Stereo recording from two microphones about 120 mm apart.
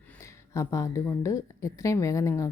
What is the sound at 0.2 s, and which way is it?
A woman's voice, 25° left (ahead or behind).